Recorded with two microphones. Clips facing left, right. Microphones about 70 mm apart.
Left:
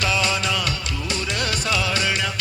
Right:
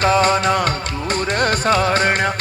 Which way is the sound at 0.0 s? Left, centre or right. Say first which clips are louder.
Right 8 dB; right.